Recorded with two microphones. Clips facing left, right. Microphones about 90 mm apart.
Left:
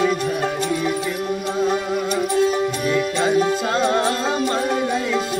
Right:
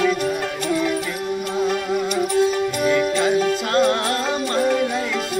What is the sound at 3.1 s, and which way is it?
Music, 20° left (ahead or behind).